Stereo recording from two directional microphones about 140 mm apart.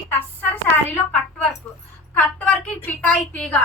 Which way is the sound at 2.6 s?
10° left (ahead or behind).